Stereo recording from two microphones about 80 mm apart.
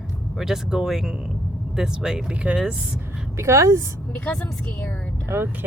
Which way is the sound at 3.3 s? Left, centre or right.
Right.